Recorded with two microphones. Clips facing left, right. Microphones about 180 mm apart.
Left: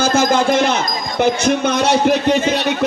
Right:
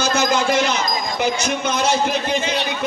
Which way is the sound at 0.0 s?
50° left (ahead or behind).